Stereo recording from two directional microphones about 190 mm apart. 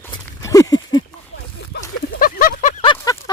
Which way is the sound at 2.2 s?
50° left (ahead or behind).